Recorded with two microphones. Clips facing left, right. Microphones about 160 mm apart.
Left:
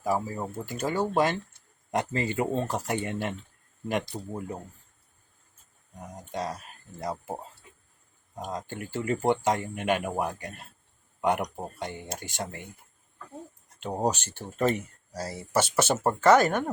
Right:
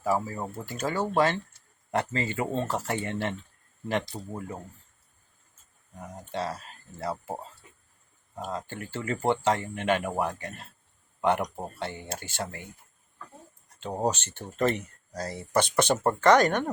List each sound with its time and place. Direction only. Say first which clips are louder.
0.0 s speech: even; 15° left (ahead or behind)
4.1 s speech: left 2 dB; 5° right (ahead or behind)
6.3 s speech: right 1 dB; 15° left (ahead or behind)
8.4 s speech: even; 15° left (ahead or behind)
13.7 s speech: even; 15° left (ahead or behind)